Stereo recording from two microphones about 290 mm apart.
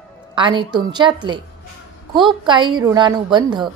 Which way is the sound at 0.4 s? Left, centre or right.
Centre.